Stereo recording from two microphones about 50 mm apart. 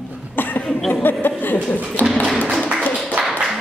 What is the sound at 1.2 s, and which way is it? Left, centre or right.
Chuckle, left.